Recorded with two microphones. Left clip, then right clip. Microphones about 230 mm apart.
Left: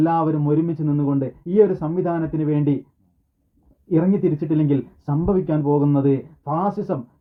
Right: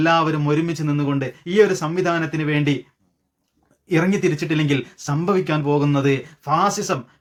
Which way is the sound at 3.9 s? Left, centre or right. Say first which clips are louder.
Right 1 dB; right.